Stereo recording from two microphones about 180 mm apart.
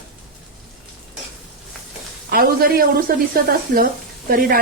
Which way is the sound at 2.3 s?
55° right (ahead or behind).